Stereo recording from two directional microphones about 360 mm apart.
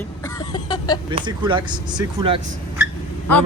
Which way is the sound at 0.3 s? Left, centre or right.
Centre.